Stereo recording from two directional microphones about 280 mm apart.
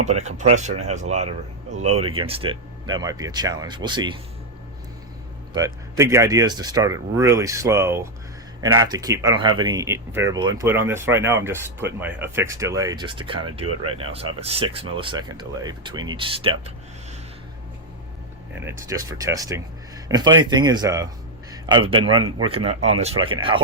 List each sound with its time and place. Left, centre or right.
0.0 s speech: right
5.5 s speech: centre
18.6 s a man's voice: centre